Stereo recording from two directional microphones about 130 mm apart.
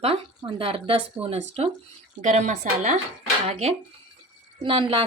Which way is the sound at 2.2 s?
70° right (ahead or behind).